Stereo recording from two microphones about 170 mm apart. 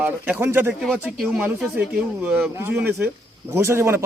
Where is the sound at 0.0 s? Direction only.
10° right (ahead or behind).